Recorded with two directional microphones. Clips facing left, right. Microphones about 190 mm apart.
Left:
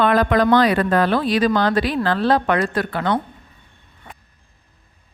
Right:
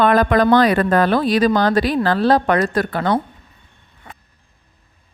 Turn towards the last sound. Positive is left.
turn(degrees=-40)  # may be behind; listen again after turning